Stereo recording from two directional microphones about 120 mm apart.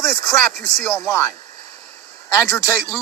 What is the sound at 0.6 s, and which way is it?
Speech, 25° left (ahead or behind).